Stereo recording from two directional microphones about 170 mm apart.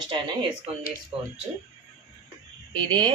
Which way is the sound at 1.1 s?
30° right (ahead or behind).